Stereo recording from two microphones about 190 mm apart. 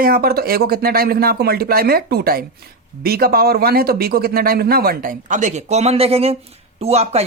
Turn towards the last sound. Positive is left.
turn(degrees=-35)  # may be behind; listen again after turning